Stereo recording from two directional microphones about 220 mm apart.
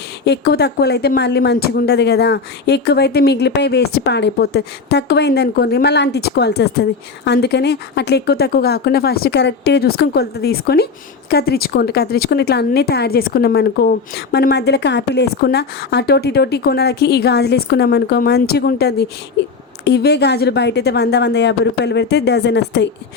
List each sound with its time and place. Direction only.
0.3 s speech: 45° left (ahead or behind)